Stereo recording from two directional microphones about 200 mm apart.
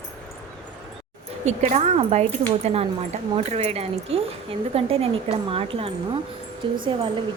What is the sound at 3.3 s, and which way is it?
A woman's voice, 30° right (ahead or behind).